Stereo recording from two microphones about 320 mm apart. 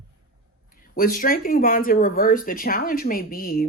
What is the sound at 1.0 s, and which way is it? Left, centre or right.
Speech, left.